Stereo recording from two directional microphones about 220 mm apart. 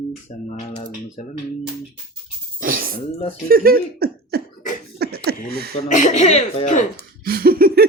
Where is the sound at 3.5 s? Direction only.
40° right (ahead or behind).